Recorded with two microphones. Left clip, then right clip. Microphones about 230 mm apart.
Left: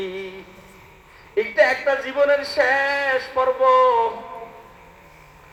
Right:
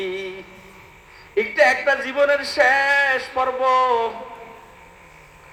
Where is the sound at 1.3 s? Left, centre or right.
Right.